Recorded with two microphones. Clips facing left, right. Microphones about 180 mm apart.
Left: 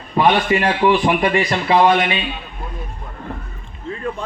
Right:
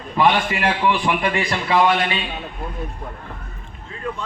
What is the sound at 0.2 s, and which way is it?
A man's voice, 25° left (ahead or behind).